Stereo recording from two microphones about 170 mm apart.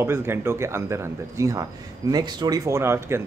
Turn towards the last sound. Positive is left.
turn(degrees=-15)  # may be behind; listen again after turning